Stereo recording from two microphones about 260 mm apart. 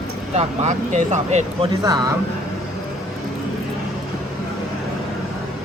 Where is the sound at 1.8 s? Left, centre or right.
Centre.